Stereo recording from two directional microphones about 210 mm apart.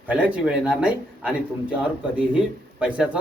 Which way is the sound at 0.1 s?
5° right (ahead or behind).